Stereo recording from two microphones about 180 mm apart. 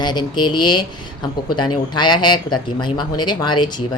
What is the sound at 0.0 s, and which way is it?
Speech, 25° left (ahead or behind).